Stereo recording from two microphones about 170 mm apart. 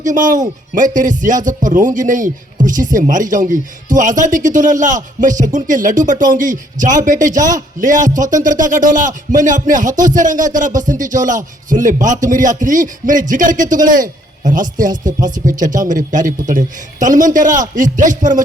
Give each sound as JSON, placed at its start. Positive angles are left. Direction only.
{"t": 0.0, "sound": "speech", "side_deg": -50}